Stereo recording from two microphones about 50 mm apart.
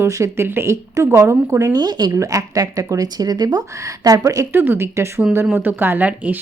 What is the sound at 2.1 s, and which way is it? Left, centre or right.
Speech, right.